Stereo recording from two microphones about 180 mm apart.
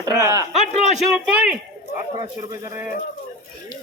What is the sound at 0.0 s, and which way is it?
Speech, 20° right (ahead or behind).